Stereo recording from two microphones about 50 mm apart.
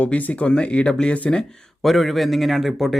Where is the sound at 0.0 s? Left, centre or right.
Left.